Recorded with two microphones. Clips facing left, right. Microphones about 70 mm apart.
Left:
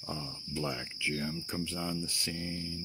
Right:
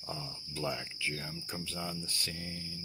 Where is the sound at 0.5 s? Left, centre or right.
Centre.